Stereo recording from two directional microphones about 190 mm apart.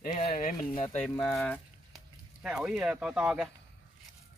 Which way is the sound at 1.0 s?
5° left (ahead or behind).